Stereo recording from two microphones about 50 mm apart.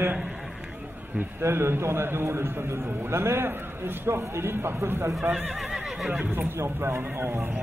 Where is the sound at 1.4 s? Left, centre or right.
Right.